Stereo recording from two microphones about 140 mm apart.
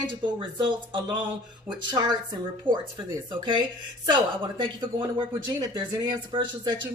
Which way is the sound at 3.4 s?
35° right (ahead or behind).